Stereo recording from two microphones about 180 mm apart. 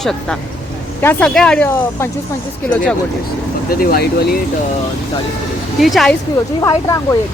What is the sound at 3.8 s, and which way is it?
Speech, 55° left (ahead or behind).